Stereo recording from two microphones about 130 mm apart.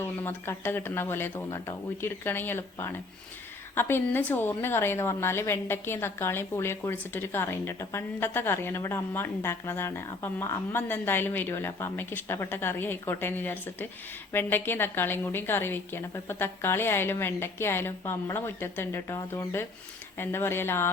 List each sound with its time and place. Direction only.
0.0 s a woman's voice: 20° left (ahead or behind)